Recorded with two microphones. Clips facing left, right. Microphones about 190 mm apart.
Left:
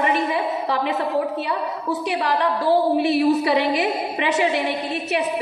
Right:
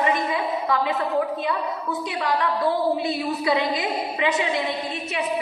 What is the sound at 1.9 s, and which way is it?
A woman's voice, 75° left (ahead or behind).